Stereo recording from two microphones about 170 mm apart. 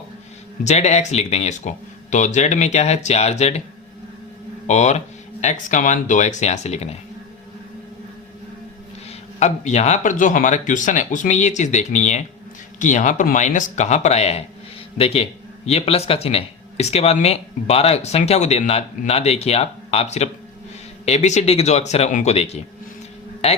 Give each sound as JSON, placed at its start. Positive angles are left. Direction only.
{"t": 0.6, "sound": "speech", "side_deg": 40}
{"t": 4.6, "sound": "speech", "side_deg": 40}
{"t": 9.0, "sound": "speech", "side_deg": 45}